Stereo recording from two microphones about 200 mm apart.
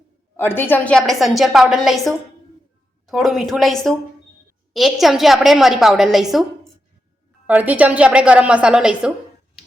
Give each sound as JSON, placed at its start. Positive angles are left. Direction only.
{"t": 0.3, "sound": "a woman's voice", "side_deg": 10}
{"t": 7.4, "sound": "a woman's voice", "side_deg": -10}